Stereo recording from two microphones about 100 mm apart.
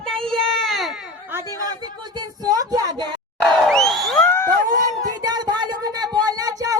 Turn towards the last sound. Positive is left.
turn(degrees=-40)  # may be behind; listen again after turning